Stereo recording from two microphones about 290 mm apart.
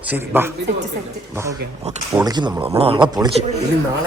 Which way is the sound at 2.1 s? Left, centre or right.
Centre.